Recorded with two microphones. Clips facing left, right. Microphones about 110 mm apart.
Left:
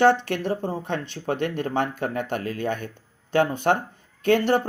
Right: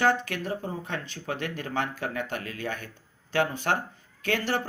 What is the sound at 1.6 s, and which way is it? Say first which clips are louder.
Speech: left 5 dB; 50° left (ahead or behind).